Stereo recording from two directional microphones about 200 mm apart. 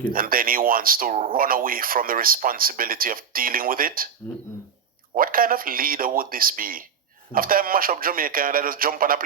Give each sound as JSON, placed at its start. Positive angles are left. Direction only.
{"t": 0.1, "sound": "speech", "side_deg": -45}
{"t": 5.1, "sound": "speech", "side_deg": -45}